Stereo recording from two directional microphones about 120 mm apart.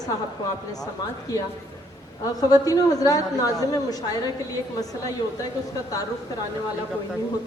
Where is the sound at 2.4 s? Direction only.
30° left (ahead or behind).